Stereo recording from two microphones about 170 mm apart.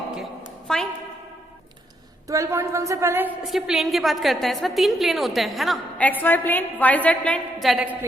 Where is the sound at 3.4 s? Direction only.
Centre (ahead or behind).